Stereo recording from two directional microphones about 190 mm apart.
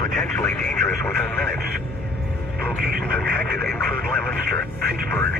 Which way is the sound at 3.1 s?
10° left (ahead or behind).